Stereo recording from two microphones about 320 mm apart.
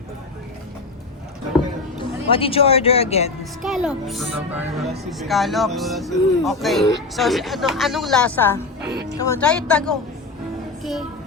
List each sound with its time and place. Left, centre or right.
2.0 s speech: centre
3.6 s speech: centre
8.8 s speech: right
9.1 s speech: centre